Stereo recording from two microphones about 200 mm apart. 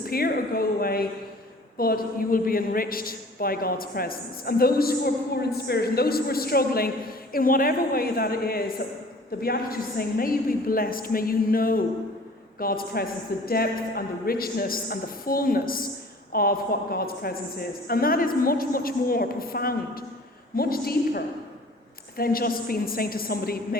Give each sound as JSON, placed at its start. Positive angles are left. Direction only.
{"t": 0.0, "sound": "a man's voice", "side_deg": 50}